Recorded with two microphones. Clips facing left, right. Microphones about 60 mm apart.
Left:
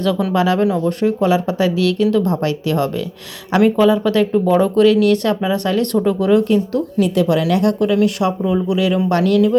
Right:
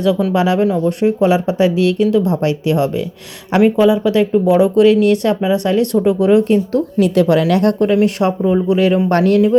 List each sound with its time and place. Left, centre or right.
0.3 s speech: centre
4.8 s speech: right
7.0 s speech: right